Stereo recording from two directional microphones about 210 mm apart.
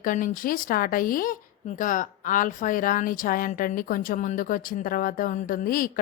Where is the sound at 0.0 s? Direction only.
40° left (ahead or behind).